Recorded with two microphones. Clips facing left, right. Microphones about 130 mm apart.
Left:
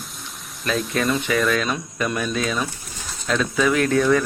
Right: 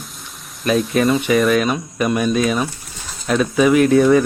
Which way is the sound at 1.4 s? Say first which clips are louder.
Right 6 dB; 20° right (ahead or behind).